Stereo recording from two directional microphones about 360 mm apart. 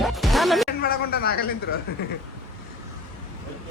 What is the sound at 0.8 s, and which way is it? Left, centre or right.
Speech, left.